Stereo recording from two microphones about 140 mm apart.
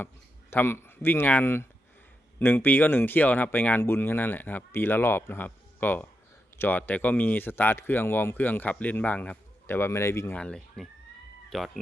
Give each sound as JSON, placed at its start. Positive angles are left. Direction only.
{"t": 0.5, "sound": "speech", "side_deg": 15}
{"t": 10.3, "sound": "speech", "side_deg": 5}